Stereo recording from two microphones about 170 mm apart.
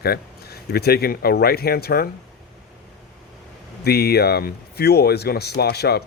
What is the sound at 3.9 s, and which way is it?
Speech, 70° left (ahead or behind).